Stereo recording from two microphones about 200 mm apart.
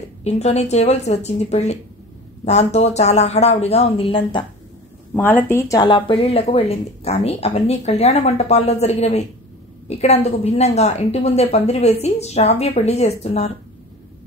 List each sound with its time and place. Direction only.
0.2 s speech: 35° left (ahead or behind)
5.1 s speech: 10° left (ahead or behind); by 13.5 s 35° left (ahead or behind)